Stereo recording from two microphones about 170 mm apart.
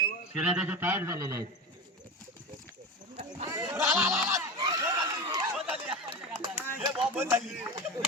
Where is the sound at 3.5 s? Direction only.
15° right (ahead or behind).